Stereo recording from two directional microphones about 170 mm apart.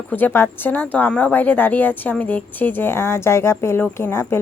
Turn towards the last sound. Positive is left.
turn(degrees=15)  # may be behind; listen again after turning